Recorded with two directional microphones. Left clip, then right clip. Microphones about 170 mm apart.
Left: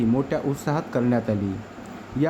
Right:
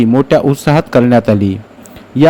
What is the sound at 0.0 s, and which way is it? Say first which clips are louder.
Speech: right 14 dB; 45° right (ahead or behind).